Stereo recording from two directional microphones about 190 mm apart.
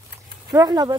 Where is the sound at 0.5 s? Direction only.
20° right (ahead or behind).